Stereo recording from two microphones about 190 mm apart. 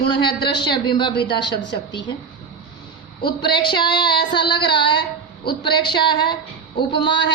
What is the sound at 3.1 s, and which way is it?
A woman's voice, 25° left (ahead or behind).